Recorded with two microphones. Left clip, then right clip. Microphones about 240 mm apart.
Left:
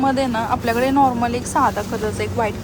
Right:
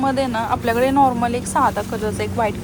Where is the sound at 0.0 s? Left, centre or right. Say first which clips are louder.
Left 1 dB; centre.